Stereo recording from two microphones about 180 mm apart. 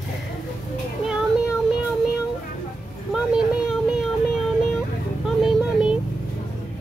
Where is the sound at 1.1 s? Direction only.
5° right (ahead or behind).